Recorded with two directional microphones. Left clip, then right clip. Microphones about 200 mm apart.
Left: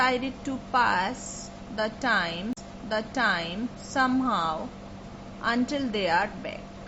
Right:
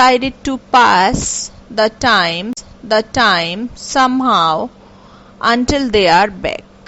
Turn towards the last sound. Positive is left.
turn(degrees=-50)  # may be behind; listen again after turning